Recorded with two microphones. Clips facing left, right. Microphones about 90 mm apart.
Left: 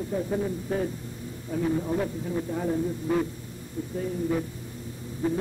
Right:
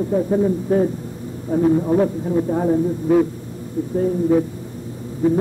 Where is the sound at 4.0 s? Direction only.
45° right (ahead or behind).